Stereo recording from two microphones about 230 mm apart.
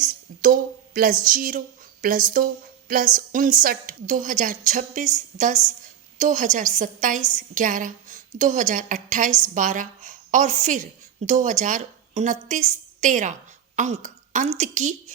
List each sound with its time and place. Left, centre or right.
0.0 s a woman's voice: right